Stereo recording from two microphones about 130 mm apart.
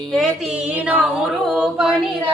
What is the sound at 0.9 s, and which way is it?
A capella, 10° right (ahead or behind).